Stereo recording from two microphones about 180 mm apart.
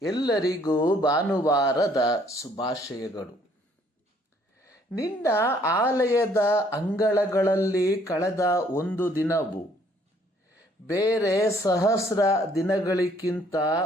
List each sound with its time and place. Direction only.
0.0 s a woman's voice: 20° left (ahead or behind)
4.6 s a woman's voice: 15° left (ahead or behind)
10.8 s a woman's voice: 15° left (ahead or behind)